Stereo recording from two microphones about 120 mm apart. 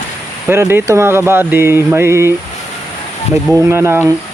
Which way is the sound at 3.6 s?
20° right (ahead or behind).